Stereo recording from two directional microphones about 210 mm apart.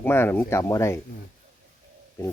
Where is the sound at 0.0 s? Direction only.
10° left (ahead or behind).